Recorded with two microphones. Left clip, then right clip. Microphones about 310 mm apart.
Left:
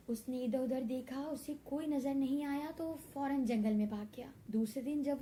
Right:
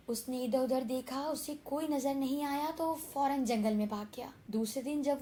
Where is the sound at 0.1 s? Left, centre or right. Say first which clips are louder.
Right 4 dB; right.